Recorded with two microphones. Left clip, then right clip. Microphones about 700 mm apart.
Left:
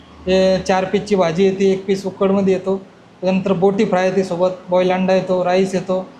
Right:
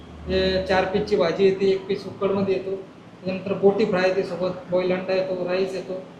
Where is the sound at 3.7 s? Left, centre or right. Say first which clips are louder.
Left 5 dB; left.